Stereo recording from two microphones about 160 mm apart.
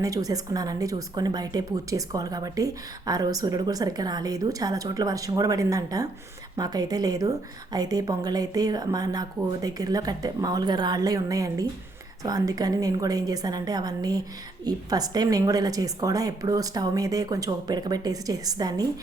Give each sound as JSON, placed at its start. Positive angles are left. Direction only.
{"t": 0.0, "sound": "speech", "side_deg": -20}